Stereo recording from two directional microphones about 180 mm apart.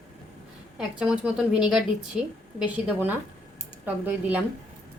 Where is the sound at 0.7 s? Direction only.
5° right (ahead or behind).